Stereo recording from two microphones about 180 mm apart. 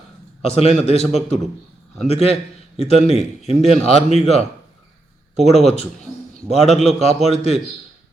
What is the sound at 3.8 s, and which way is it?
Speech, 35° left (ahead or behind).